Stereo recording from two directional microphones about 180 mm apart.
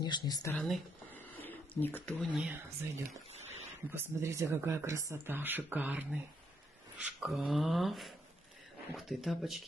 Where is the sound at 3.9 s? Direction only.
15° right (ahead or behind).